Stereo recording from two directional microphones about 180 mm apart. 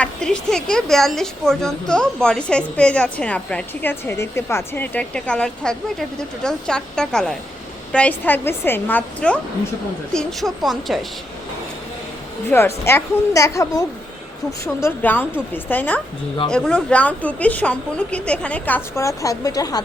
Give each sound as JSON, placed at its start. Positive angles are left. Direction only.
{"t": 0.0, "sound": "a woman's voice", "side_deg": 5}
{"t": 12.5, "sound": "a woman's voice", "side_deg": 15}